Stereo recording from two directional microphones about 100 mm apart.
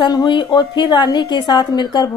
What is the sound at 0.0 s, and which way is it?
Speech, 50° left (ahead or behind).